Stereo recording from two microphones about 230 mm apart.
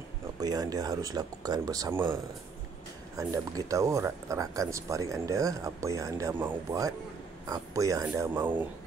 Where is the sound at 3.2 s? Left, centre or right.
Centre.